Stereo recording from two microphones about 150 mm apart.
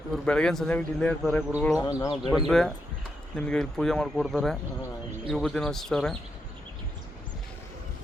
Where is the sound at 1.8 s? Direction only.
25° left (ahead or behind).